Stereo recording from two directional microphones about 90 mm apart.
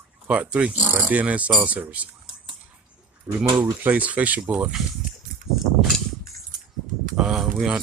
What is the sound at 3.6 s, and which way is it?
Speech, 15° right (ahead or behind).